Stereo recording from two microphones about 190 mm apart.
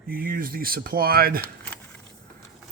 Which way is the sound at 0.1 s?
50° right (ahead or behind).